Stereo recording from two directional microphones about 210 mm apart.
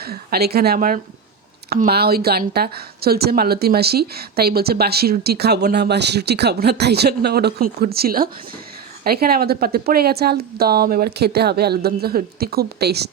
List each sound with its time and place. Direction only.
0.0 s a woman's voice: 45° right (ahead or behind)